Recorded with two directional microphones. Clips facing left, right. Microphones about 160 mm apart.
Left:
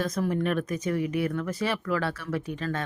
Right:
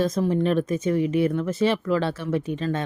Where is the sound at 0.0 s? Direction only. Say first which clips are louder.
Right 5 dB; 25° right (ahead or behind).